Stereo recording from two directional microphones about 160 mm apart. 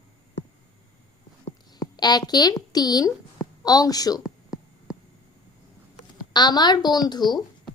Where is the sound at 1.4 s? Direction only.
25° left (ahead or behind).